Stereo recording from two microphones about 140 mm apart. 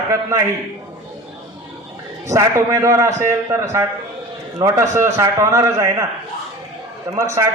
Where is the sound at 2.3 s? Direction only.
25° right (ahead or behind).